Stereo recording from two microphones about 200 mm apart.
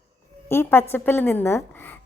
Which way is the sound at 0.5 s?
10° left (ahead or behind).